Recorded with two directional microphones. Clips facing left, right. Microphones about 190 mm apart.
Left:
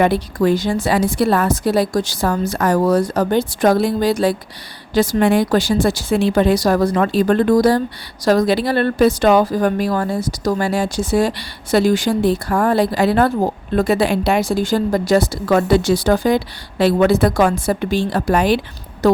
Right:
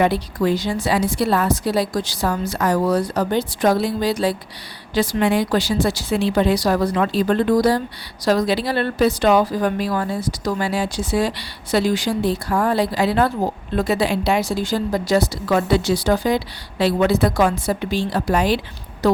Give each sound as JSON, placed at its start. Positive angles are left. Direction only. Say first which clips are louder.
{"t": 0.0, "sound": "a woman's voice", "louder": "left 3 dB", "side_deg": 50}